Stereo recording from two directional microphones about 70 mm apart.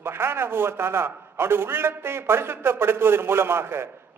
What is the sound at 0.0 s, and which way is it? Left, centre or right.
A man's voice, right.